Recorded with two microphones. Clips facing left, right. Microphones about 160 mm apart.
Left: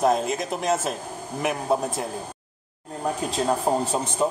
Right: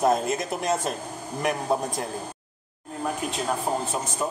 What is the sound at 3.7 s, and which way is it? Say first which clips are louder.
Speech: left 4 dB; 35° left (ahead or behind).